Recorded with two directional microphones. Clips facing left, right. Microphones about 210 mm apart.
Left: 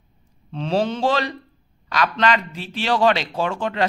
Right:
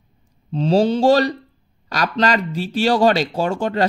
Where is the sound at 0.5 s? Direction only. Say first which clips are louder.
Right 6 dB; 35° right (ahead or behind).